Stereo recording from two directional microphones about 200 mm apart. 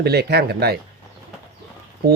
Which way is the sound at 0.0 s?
55° right (ahead or behind).